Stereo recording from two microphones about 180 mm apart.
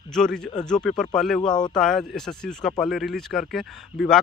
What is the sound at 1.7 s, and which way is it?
Speech, 5° left (ahead or behind).